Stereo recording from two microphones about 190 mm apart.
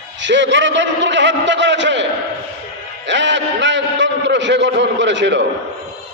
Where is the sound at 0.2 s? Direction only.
70° right (ahead or behind).